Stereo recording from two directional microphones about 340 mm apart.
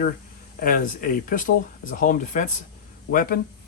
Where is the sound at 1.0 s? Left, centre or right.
Left.